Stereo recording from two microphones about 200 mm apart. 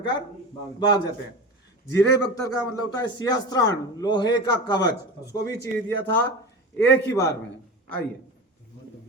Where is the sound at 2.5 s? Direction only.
20° left (ahead or behind).